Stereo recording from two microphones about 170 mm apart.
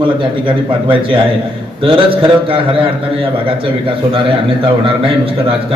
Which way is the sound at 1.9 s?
30° right (ahead or behind).